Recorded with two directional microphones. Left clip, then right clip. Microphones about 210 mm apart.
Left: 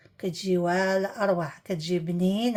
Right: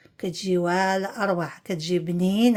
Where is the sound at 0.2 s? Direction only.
25° right (ahead or behind).